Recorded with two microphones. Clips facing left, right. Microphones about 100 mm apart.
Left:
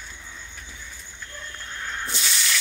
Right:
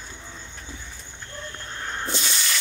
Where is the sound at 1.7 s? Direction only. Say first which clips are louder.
Right 2 dB; 30° right (ahead or behind).